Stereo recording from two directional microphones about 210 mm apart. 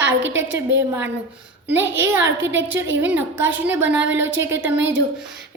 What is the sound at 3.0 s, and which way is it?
A woman's voice, 10° right (ahead or behind).